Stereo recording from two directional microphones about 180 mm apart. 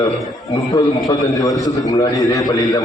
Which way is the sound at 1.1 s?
20° left (ahead or behind).